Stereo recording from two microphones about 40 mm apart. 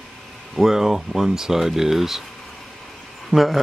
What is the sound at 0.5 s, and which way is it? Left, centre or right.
Speech, centre.